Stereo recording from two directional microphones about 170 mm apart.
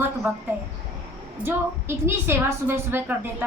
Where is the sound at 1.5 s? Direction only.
15° right (ahead or behind).